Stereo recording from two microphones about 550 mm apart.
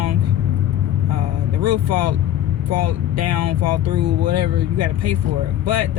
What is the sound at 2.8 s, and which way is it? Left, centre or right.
Speech, right.